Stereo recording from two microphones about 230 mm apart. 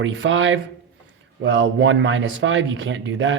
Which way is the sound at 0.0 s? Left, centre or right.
Right.